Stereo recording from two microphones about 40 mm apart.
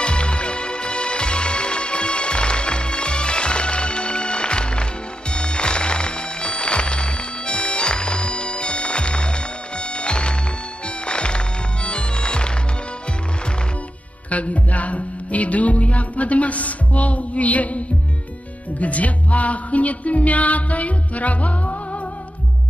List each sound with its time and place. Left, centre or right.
0.0 s music: left
14.3 s music: left